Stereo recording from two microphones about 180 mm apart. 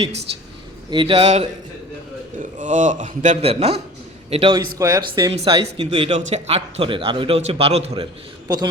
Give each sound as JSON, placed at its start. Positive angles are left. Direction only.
{"t": 0.9, "sound": "a man's voice", "side_deg": -25}
{"t": 2.4, "sound": "a man's voice", "side_deg": -45}
{"t": 4.8, "sound": "speech", "side_deg": -20}
{"t": 5.3, "sound": "a man's voice", "side_deg": -35}
{"t": 8.4, "sound": "speech", "side_deg": -25}